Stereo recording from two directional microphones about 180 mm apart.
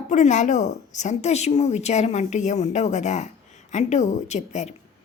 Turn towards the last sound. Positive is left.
turn(degrees=40)  # may be behind; listen again after turning